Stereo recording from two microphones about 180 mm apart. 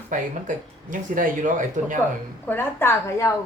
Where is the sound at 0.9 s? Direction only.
45° right (ahead or behind).